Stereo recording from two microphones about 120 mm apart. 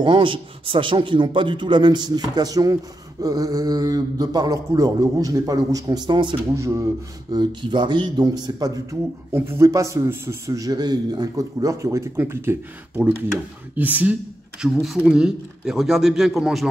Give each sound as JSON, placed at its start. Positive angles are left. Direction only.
{"t": 0.0, "sound": "a man's voice", "side_deg": -45}
{"t": 6.5, "sound": "a man's voice", "side_deg": -25}
{"t": 9.3, "sound": "a man's voice", "side_deg": -20}
{"t": 13.7, "sound": "speech", "side_deg": -15}